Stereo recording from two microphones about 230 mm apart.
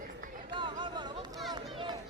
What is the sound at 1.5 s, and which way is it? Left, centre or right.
Run, centre.